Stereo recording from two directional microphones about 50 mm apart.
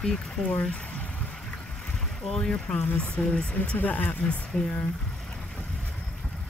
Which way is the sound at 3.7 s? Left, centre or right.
Left.